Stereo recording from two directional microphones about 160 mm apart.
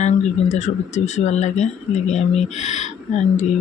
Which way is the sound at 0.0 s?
45° left (ahead or behind).